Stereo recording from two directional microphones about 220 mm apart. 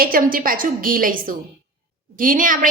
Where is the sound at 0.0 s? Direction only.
40° right (ahead or behind).